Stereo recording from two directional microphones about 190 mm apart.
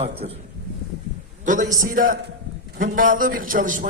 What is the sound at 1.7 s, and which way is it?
A man's voice, 45° right (ahead or behind).